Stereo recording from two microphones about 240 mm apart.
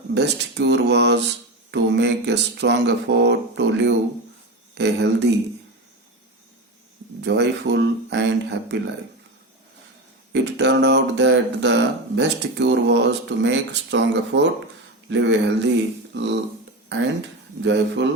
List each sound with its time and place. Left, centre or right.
0.1 s speech: right
7.2 s speech: right
10.3 s speech: right